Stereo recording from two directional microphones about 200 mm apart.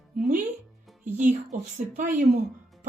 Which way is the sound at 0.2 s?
45° right (ahead or behind).